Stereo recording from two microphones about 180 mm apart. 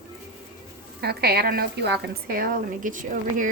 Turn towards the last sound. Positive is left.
turn(degrees=-45)  # may be behind; listen again after turning